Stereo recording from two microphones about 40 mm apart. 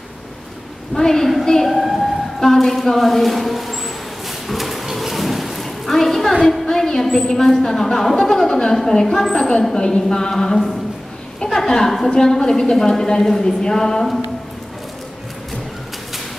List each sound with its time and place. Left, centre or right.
0.9 s a woman's voice: centre
1.7 s emergency vehicle: centre
2.5 s a woman's voice: centre
4.5 s a sound: centre
6.6 s a woman's voice: centre